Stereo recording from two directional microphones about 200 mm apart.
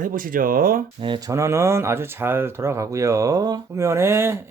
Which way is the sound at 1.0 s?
20° right (ahead or behind).